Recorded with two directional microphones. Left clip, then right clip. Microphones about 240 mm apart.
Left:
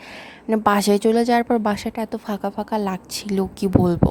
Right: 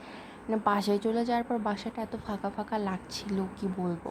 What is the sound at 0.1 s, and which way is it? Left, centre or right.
A woman's voice, left.